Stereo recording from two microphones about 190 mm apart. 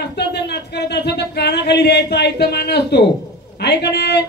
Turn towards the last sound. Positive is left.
turn(degrees=60)  # may be behind; listen again after turning